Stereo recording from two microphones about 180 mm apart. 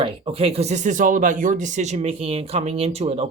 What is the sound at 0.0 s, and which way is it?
Speech, 30° right (ahead or behind).